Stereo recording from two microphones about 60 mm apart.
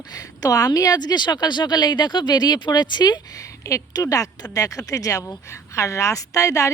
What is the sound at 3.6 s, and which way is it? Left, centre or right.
Speech, left.